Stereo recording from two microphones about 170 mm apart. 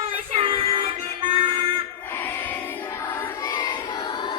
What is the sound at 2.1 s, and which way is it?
Music, 10° left (ahead or behind).